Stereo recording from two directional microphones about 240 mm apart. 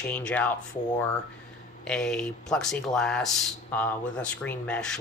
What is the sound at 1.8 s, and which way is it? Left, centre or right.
Speech, centre.